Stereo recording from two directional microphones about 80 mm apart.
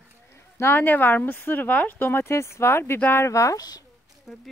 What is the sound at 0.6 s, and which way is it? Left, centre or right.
Speech, left.